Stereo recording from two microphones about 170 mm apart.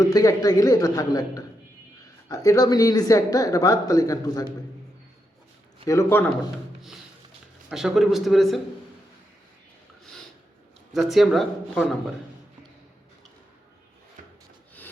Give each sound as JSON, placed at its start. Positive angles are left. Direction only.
{"t": 0.0, "sound": "speech", "side_deg": 20}
{"t": 5.8, "sound": "speech", "side_deg": 20}
{"t": 7.7, "sound": "speech", "side_deg": 0}
{"t": 10.9, "sound": "speech", "side_deg": 0}